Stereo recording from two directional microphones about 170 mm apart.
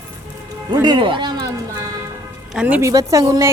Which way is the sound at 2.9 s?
20° right (ahead or behind).